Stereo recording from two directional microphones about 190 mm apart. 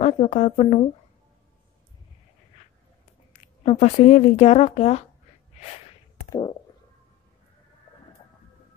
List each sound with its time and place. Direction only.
0.0 s speech: 35° left (ahead or behind)
3.3 s speech: 35° left (ahead or behind)